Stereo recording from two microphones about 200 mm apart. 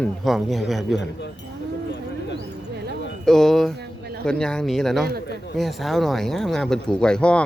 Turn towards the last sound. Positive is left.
turn(degrees=5)  # may be behind; listen again after turning